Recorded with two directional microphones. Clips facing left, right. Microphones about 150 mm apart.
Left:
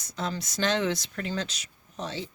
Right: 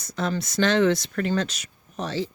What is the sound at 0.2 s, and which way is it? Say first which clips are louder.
Speech: right 6 dB; 60° right (ahead or behind).